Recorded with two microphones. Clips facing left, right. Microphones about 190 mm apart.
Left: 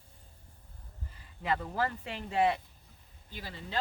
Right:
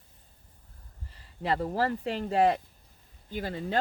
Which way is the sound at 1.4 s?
35° right (ahead or behind).